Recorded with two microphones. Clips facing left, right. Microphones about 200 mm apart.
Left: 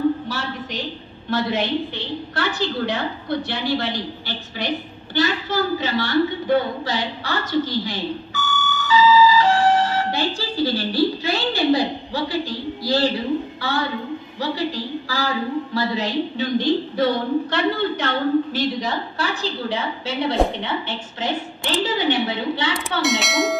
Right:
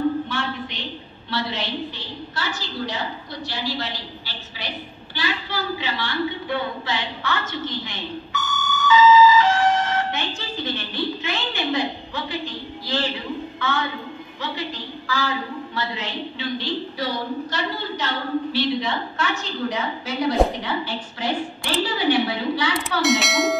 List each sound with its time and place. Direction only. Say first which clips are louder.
0.3 s a sound: even; 40° left (ahead or behind)
1.3 s a woman's voice: left 6 dB; 50° left (ahead or behind); by 22.8 s 25° left (ahead or behind)
22.8 s speech: right 1 dB; centre (ahead or behind)